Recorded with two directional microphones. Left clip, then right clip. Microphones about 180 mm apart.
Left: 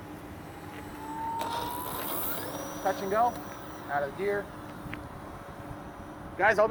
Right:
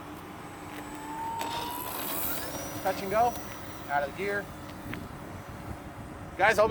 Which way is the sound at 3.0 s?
35° right (ahead or behind).